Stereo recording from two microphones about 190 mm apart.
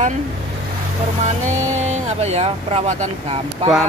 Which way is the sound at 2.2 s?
35° right (ahead or behind).